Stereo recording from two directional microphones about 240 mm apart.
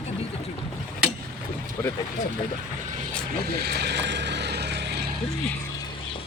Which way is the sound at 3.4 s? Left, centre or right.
Right.